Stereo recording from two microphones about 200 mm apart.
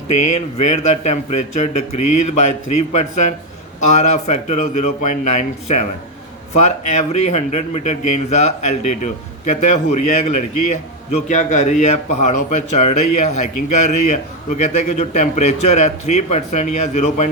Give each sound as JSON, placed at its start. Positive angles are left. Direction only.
{"t": 0.1, "sound": "a man's voice", "side_deg": 35}